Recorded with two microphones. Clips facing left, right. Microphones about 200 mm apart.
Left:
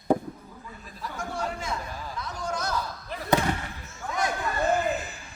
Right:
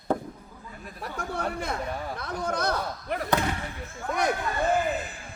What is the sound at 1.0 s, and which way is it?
A man's voice, 60° right (ahead or behind).